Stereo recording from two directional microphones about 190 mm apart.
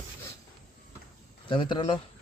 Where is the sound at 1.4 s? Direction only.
25° left (ahead or behind).